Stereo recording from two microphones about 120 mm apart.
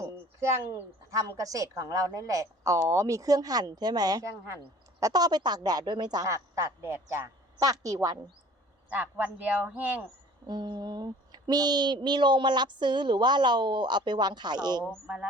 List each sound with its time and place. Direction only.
0.0 s a woman's voice: 25° right (ahead or behind)
8.9 s a man's voice: 15° right (ahead or behind)
10.4 s speech: 40° right (ahead or behind)
15.0 s a man's voice: 10° right (ahead or behind)